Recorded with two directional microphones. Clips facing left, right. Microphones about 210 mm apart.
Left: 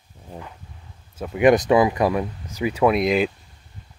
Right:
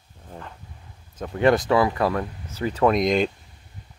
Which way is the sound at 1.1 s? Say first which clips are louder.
Left 3 dB; 10° left (ahead or behind).